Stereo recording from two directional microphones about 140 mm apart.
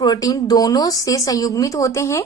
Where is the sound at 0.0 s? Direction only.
30° left (ahead or behind).